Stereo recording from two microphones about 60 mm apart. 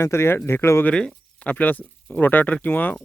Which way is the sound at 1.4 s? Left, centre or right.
Left.